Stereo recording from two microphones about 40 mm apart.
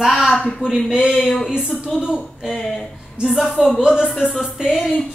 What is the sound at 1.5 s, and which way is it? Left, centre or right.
A woman's voice, right.